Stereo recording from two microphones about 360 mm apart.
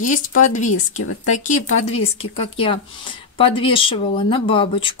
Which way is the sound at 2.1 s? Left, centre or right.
Centre.